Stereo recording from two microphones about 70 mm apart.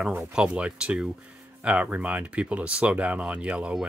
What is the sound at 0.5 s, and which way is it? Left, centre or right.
Speech, centre.